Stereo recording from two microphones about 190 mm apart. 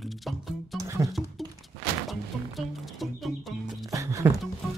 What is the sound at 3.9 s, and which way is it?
Music, 15° right (ahead or behind).